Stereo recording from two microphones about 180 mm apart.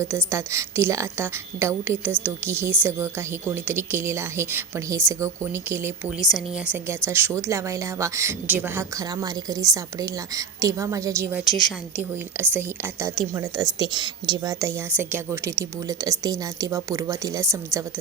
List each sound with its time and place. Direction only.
0.3 s a woman's voice: 15° right (ahead or behind)